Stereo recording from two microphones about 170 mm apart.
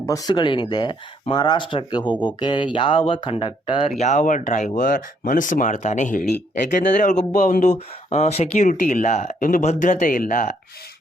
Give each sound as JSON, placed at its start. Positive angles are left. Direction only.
{"t": 0.0, "sound": "speech", "side_deg": 20}